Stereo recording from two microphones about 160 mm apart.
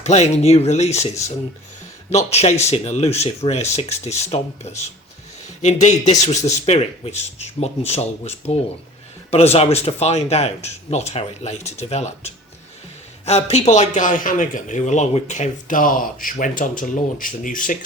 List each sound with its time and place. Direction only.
0.0 s speech: 45° left (ahead or behind)
2.0 s speech: 45° left (ahead or behind)